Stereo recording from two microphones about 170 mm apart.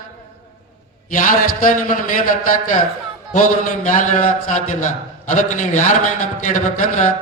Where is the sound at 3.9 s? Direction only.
50° left (ahead or behind).